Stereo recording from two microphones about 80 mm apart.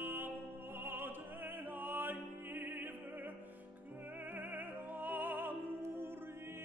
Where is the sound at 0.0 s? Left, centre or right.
Right.